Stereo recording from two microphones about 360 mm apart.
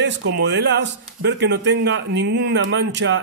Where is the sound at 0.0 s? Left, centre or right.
Right.